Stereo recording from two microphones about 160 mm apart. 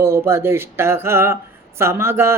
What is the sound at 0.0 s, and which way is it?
Speech, 15° right (ahead or behind).